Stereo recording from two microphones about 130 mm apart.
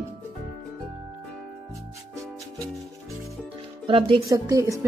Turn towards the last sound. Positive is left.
turn(degrees=-25)  # may be behind; listen again after turning